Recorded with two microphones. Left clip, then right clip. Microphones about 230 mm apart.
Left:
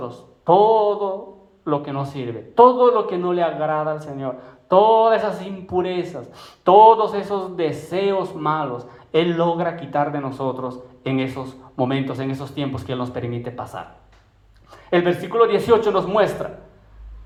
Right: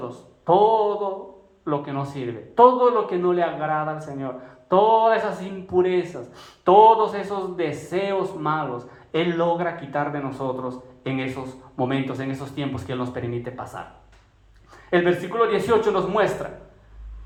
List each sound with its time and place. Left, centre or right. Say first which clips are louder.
0.4 s a man's voice: left 3 dB; left